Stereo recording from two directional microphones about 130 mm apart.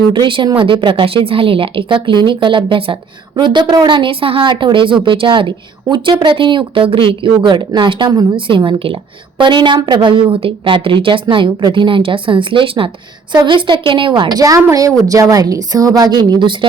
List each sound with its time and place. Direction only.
0.1 s a woman's voice: 40° right (ahead or behind)
8.4 s a woman's voice: 40° right (ahead or behind)